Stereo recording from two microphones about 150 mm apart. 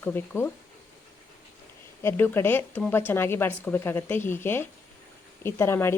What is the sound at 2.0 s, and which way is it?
A woman's voice, 15° left (ahead or behind).